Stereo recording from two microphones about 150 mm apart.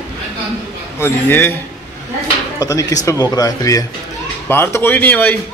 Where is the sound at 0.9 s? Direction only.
15° left (ahead or behind).